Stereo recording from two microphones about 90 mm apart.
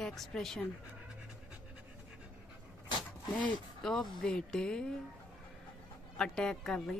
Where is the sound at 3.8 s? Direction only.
5° left (ahead or behind).